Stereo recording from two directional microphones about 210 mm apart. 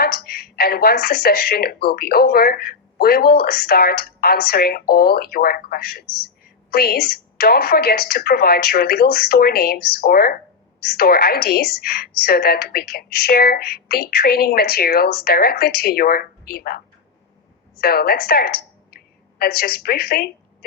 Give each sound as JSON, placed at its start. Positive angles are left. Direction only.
{"t": 0.0, "sound": "a woman's voice", "side_deg": 45}